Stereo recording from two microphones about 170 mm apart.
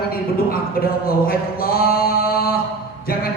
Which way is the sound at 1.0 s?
60° left (ahead or behind).